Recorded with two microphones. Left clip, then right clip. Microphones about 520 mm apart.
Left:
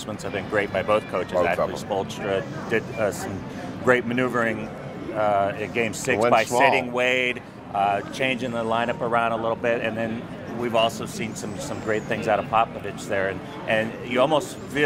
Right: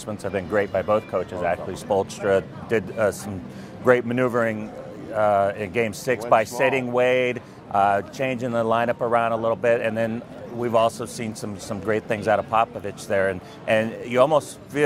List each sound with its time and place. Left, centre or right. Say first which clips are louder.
0.2 s speech: right 2 dB; right